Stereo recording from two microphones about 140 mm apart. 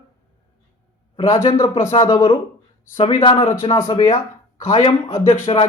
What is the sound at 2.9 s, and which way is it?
Speech, 40° left (ahead or behind).